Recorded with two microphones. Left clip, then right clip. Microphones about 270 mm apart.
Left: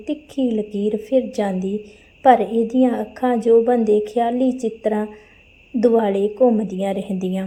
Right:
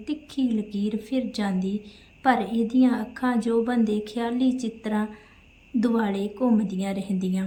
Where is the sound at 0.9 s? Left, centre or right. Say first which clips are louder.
Left 12 dB; centre.